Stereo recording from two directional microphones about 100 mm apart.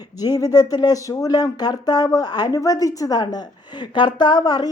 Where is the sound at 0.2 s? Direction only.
40° left (ahead or behind).